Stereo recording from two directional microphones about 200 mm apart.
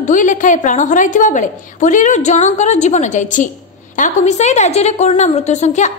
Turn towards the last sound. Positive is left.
turn(degrees=35)  # may be behind; listen again after turning